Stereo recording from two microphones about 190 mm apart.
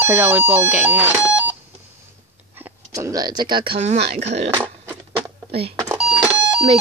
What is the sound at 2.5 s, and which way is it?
Speech, 15° right (ahead or behind).